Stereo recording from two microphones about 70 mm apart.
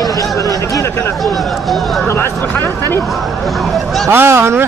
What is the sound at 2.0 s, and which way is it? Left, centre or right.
Speech, left.